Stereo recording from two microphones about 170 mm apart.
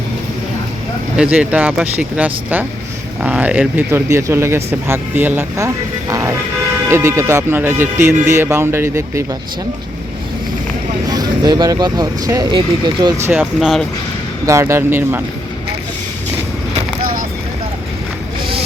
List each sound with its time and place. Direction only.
1.1 s speech: 5° right (ahead or behind)
11.1 s speech: 25° right (ahead or behind)
13.4 s speech: centre (ahead or behind)
14.4 s speech: 15° right (ahead or behind)